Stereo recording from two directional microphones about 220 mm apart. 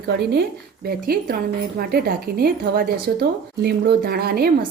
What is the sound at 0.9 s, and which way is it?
Speech, 45° right (ahead or behind).